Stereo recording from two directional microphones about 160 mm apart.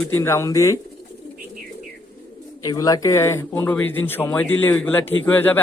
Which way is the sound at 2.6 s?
25° left (ahead or behind).